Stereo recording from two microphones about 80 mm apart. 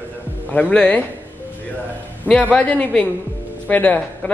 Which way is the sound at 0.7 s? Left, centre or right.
Centre.